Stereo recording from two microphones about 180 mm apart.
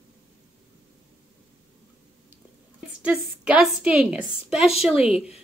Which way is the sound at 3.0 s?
5° right (ahead or behind).